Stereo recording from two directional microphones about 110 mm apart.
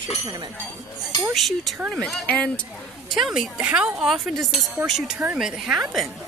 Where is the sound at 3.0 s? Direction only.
5° right (ahead or behind).